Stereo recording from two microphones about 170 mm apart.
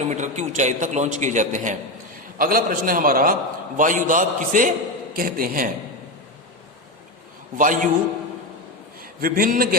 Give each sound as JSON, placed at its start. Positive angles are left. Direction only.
{"t": 0.1, "sound": "a man's voice", "side_deg": -45}
{"t": 7.6, "sound": "a man's voice", "side_deg": -50}
{"t": 9.0, "sound": "a man's voice", "side_deg": -60}